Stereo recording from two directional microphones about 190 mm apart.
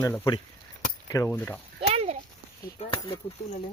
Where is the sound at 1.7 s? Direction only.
30° right (ahead or behind).